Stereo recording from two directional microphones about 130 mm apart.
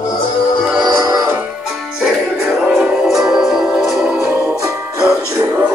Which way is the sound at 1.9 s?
Centre (ahead or behind).